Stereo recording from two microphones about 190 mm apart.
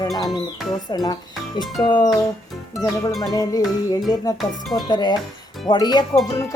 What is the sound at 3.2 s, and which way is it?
Speech, 20° left (ahead or behind).